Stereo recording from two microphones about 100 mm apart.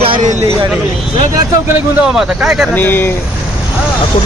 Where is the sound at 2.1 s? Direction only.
5° right (ahead or behind).